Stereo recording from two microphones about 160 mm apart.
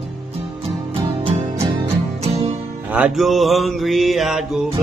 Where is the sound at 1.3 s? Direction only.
40° right (ahead or behind).